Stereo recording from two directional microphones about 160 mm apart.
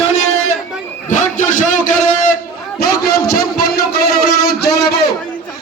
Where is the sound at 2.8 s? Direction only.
75° left (ahead or behind).